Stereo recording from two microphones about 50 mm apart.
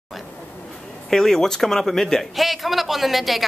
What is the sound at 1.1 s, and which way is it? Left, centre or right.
A man's voice, centre.